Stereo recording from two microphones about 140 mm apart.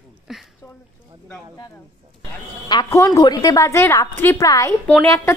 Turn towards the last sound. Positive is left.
turn(degrees=20)  # may be behind; listen again after turning